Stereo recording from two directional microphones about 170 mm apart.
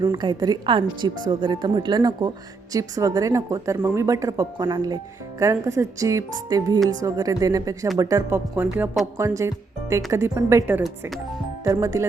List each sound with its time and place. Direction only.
0.0 s a woman's voice: 25° right (ahead or behind)